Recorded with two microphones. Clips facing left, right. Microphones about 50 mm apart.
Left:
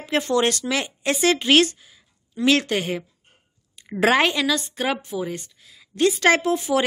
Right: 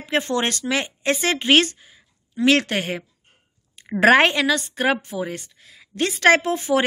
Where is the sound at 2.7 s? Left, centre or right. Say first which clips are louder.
Left 1 dB; right.